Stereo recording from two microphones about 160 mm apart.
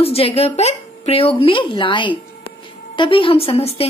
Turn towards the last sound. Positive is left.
turn(degrees=40)  # may be behind; listen again after turning